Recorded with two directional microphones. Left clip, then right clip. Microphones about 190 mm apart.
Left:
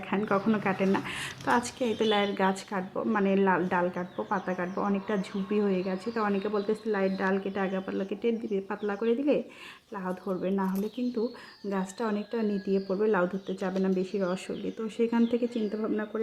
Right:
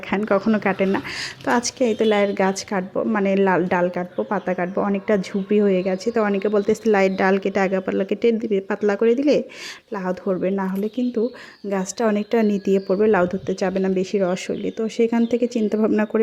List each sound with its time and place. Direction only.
0.1 s a woman's voice: 35° right (ahead or behind)
11.7 s a woman's voice: 30° right (ahead or behind)